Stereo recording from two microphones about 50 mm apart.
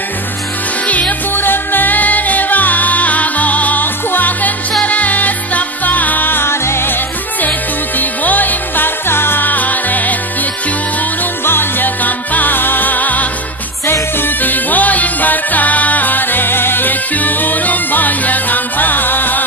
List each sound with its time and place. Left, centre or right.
0.8 s music: left
1.3 s music: left
8.0 s music: left
11.4 s music: left